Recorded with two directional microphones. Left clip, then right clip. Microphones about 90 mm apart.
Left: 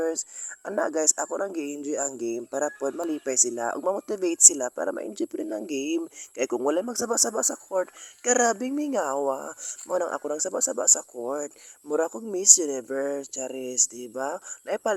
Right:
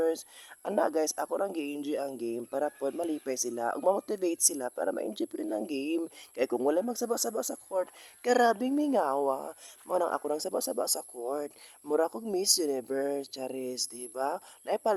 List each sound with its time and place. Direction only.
0.0 s a sound: 30° left (ahead or behind)
0.8 s a man's voice: 30° left (ahead or behind)
6.7 s a man's voice: 40° left (ahead or behind)
8.2 s a man's voice: 25° left (ahead or behind)